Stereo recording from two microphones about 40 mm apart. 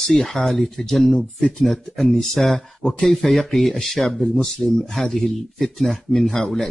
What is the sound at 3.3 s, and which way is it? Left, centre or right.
Speech, centre.